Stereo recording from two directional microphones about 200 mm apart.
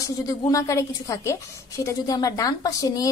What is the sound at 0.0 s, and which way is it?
A woman's voice, 15° left (ahead or behind).